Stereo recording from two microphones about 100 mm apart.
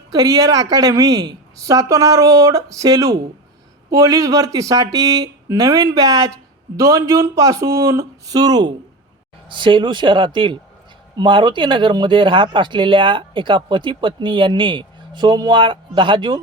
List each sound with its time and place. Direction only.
0.1 s a woman's voice: 40° right (ahead or behind)
9.5 s speech: 55° right (ahead or behind)